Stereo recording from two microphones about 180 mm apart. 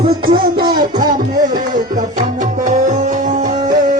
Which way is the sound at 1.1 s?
50° right (ahead or behind).